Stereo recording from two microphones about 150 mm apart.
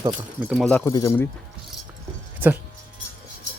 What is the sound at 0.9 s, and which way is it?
Speech, 20° left (ahead or behind).